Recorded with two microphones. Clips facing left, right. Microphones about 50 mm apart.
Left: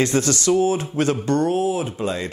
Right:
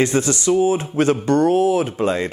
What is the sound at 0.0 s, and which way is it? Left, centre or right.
Speech, right.